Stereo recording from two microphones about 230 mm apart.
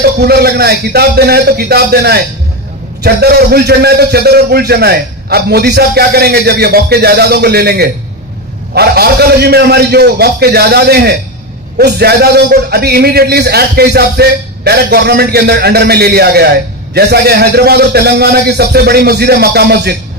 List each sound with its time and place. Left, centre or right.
0.0 s a man's voice: right